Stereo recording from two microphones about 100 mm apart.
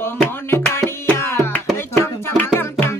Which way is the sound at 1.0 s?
25° left (ahead or behind).